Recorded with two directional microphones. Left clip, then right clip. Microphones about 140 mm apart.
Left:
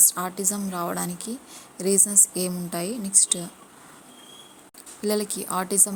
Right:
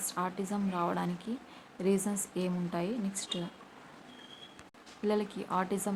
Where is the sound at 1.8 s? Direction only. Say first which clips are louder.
Left 8 dB; 30° left (ahead or behind).